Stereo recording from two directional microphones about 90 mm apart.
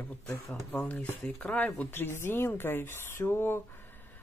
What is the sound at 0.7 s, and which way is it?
Speech, 5° left (ahead or behind).